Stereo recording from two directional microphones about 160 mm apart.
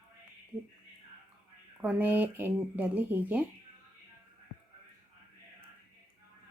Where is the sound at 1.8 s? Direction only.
10° right (ahead or behind).